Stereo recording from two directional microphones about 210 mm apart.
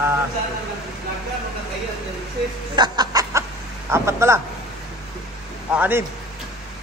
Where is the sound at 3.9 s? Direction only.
15° right (ahead or behind).